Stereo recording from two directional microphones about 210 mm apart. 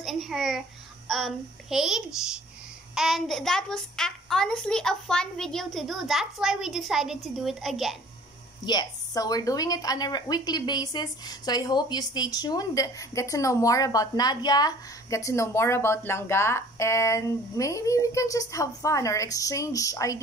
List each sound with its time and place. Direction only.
0.0 s a child's voice: centre (ahead or behind)
8.6 s a woman's voice: 20° left (ahead or behind)